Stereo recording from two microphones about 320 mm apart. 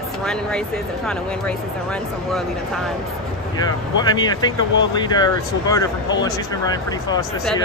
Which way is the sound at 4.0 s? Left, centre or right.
Centre.